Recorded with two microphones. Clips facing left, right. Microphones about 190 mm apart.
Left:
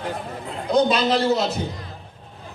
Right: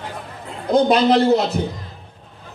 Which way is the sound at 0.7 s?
60° right (ahead or behind).